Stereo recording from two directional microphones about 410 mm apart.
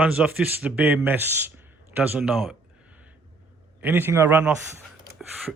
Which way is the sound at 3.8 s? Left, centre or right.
Centre.